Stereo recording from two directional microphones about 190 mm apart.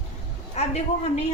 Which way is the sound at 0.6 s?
35° left (ahead or behind).